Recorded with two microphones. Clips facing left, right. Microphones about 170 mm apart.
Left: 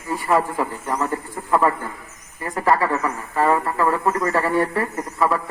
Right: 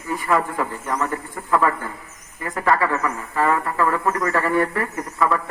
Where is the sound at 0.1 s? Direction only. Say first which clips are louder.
Left 1 dB; 25° left (ahead or behind).